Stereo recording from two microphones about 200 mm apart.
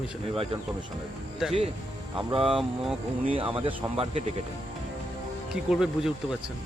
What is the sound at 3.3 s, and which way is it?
Speech, 25° right (ahead or behind).